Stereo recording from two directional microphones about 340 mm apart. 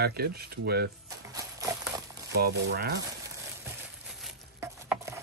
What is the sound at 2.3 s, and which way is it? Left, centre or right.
Speech, right.